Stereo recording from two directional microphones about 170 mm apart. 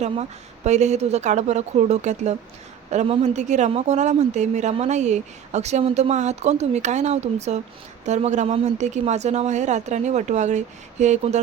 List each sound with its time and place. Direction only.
0.0 s a woman's voice: 40° right (ahead or behind)